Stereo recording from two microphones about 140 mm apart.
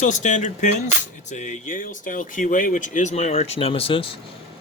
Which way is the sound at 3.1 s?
50° left (ahead or behind).